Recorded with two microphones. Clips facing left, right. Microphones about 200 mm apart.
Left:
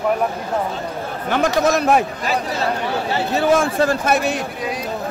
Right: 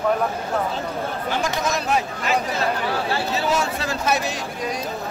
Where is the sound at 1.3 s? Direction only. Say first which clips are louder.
Left 9 dB; 55° left (ahead or behind).